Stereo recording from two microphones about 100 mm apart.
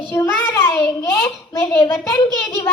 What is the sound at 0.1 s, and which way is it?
Child singing, 20° left (ahead or behind).